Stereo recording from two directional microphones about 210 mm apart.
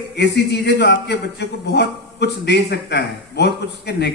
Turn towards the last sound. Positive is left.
turn(degrees=55)  # may be behind; listen again after turning